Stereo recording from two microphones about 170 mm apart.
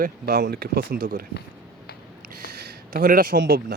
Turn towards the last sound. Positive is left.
turn(degrees=-65)  # may be behind; listen again after turning